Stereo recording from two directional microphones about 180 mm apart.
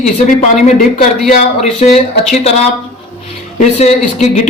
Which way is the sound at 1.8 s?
35° left (ahead or behind).